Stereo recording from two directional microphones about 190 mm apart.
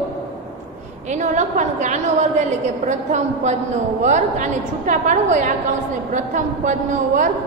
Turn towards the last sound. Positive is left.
turn(degrees=-40)  # may be behind; listen again after turning